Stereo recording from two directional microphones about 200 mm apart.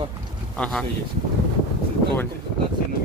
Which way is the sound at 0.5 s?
5° left (ahead or behind).